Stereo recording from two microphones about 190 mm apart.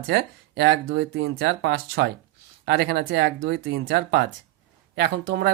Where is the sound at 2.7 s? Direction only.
65° right (ahead or behind); by 3.8 s 80° right.